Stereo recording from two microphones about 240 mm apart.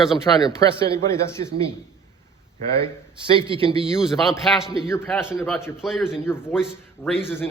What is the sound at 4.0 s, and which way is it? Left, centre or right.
A man's voice, centre.